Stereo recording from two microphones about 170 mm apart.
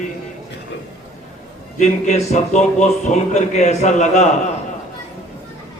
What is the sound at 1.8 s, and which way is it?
A man's voice, 45° left (ahead or behind).